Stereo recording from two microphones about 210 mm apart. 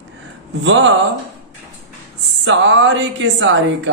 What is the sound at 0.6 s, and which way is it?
Speech, 60° right (ahead or behind).